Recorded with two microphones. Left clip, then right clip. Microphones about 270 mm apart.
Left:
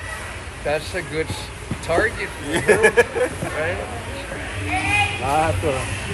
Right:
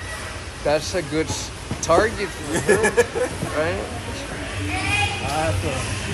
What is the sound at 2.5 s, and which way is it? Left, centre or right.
Speech, left.